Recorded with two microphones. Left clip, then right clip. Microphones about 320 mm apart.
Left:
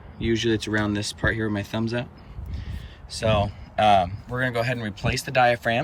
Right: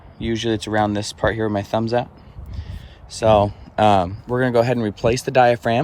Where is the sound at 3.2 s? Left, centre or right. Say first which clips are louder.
Right 8 dB; centre.